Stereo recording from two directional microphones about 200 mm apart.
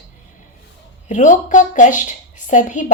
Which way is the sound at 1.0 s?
40° left (ahead or behind).